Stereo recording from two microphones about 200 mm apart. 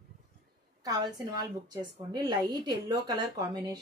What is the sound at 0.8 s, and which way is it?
A woman's voice, 20° right (ahead or behind).